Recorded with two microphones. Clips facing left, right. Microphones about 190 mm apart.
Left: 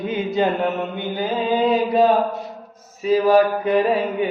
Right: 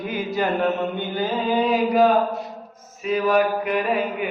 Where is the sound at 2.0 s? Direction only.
Centre (ahead or behind).